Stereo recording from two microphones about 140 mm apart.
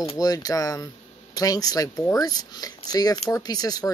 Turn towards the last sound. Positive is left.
turn(degrees=25)  # may be behind; listen again after turning